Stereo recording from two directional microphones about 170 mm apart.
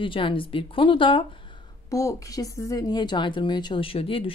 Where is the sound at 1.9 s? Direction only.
20° left (ahead or behind).